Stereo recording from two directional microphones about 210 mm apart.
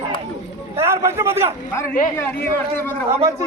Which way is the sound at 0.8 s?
10° right (ahead or behind).